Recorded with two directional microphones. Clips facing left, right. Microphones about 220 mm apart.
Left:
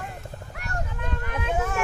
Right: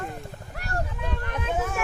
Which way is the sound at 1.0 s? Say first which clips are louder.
Even; centre (ahead or behind).